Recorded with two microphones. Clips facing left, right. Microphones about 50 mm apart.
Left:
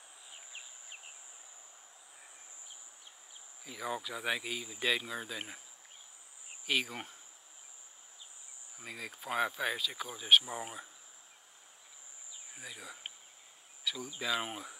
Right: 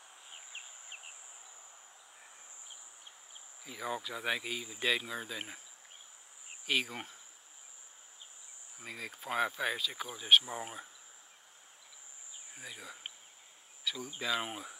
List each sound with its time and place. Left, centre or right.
0.3 s insect: right
3.6 s speech: centre
6.6 s cricket: centre
8.7 s speech: centre
12.5 s speech: centre